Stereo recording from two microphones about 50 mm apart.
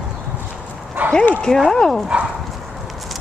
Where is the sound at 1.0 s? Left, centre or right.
Right.